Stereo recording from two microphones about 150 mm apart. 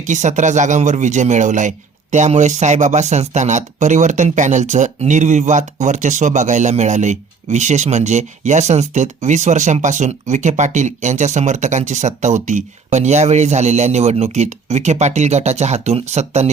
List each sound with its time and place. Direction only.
0.0 s speech: 55° right (ahead or behind)